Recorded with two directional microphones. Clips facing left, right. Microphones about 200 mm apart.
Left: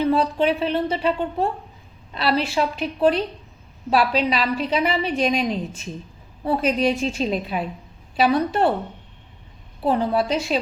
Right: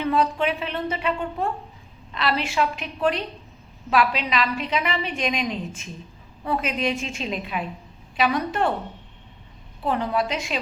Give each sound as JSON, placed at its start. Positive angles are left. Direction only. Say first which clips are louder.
{"t": 0.0, "sound": "a woman's voice", "louder": "left 3 dB", "side_deg": 35}
{"t": 9.8, "sound": "a woman's voice", "louder": "left 4 dB", "side_deg": 30}